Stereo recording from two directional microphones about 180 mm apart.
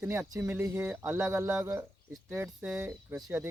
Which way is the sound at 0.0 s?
15° right (ahead or behind).